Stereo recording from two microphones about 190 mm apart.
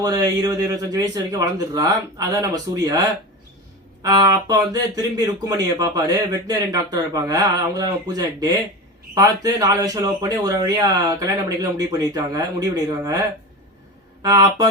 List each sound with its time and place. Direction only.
0.0 s speech: 20° right (ahead or behind)
4.0 s speech: 20° right (ahead or behind)